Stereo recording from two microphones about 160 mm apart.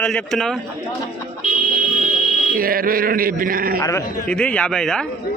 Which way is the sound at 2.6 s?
65° right (ahead or behind).